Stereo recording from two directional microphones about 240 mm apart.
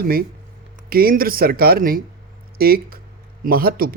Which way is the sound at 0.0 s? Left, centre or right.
Right.